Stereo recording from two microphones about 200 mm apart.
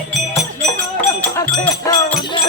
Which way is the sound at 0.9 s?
5° left (ahead or behind).